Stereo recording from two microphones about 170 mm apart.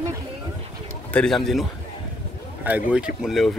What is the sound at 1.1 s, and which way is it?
Speech, 5° left (ahead or behind).